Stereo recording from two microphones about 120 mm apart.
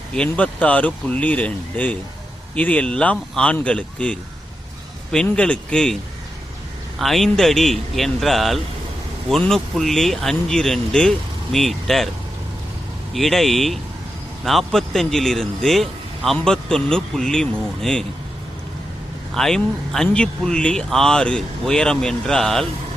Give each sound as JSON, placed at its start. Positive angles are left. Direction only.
{"t": 0.2, "sound": "speech", "side_deg": 10}
{"t": 7.0, "sound": "speech", "side_deg": 0}
{"t": 13.1, "sound": "speech", "side_deg": 0}
{"t": 19.3, "sound": "speech", "side_deg": 5}